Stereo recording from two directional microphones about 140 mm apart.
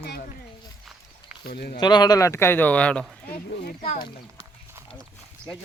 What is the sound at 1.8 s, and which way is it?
Speech, 30° left (ahead or behind).